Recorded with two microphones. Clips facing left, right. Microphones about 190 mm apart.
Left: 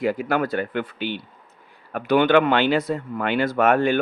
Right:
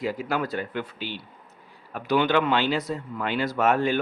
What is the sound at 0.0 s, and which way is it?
Speech, 55° left (ahead or behind).